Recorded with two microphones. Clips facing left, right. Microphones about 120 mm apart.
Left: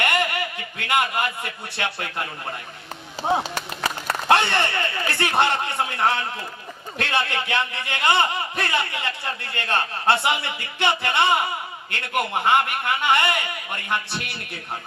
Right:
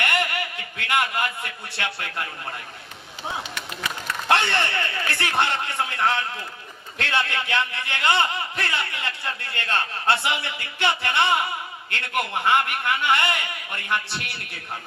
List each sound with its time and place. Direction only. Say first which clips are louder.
0.0 s a man's voice: left 2 dB; 20° left (ahead or behind)
3.2 s speech: left 9 dB; 35° left (ahead or behind)
4.3 s a man's voice: left 2 dB; 20° left (ahead or behind)